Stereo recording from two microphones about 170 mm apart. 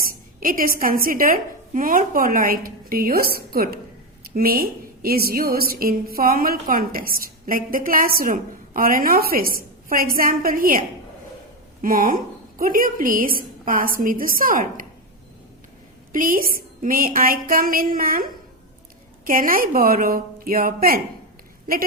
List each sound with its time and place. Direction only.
0.3 s a woman's voice: 55° right (ahead or behind)
16.1 s a woman's voice: 55° right (ahead or behind)